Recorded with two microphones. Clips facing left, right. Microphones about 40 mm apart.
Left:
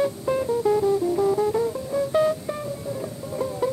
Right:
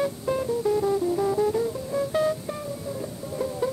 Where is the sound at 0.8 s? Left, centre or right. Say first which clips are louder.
Left 3 dB; centre.